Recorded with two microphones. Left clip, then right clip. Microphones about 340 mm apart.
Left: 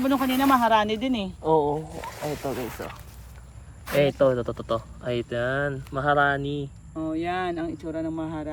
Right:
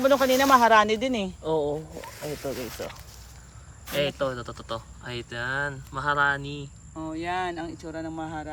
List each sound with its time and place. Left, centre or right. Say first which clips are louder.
0.0 s speech: right 3 dB; right
1.5 s speech: left 5 dB; centre
3.8 s speech: left 6 dB; centre
6.4 s cricket: left 7 dB; centre
6.9 s speech: left 2 dB; centre